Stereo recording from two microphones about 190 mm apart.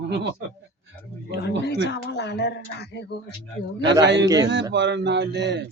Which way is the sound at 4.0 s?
65° right (ahead or behind).